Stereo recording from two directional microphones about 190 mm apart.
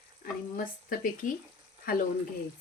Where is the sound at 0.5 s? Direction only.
50° left (ahead or behind).